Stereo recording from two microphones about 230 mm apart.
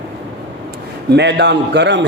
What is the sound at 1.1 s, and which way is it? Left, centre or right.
Speech, right.